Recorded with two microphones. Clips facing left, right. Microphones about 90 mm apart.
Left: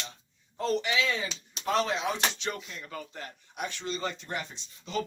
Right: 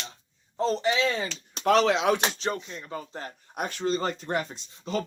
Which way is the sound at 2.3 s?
35° right (ahead or behind).